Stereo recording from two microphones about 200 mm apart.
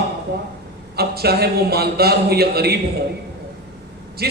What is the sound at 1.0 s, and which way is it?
A man's voice, 50° right (ahead or behind).